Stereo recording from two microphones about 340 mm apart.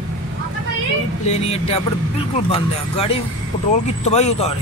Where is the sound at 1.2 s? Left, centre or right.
Centre.